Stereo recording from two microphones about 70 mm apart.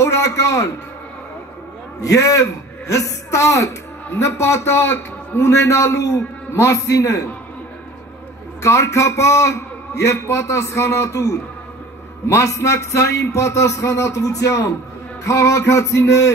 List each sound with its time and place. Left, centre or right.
0.0 s a man's voice: left
2.0 s a man's voice: left
8.6 s a man's voice: left